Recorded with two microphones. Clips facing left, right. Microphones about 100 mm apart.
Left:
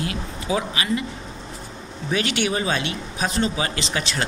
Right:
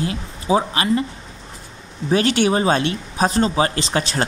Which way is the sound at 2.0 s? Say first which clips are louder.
Right 6 dB; 40° right (ahead or behind).